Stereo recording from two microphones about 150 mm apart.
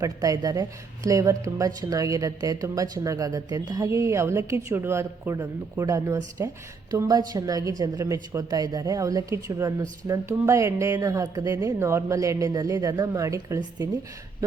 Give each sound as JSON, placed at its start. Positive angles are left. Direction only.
{"t": 0.0, "sound": "speech", "side_deg": -25}